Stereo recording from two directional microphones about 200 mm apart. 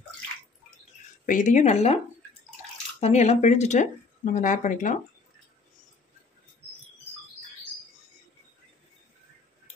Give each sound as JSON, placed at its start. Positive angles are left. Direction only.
{"t": 1.2, "sound": "speech", "side_deg": 40}
{"t": 3.0, "sound": "speech", "side_deg": 35}